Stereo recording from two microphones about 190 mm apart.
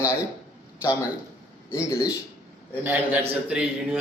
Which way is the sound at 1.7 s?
15° left (ahead or behind).